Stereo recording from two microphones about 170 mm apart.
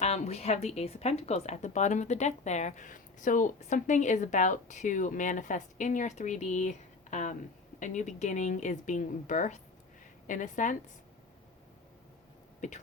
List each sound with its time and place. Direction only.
0.0 s speech: 40° left (ahead or behind)